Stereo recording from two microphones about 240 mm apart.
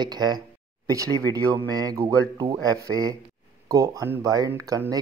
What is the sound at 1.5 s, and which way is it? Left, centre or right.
Speech, centre.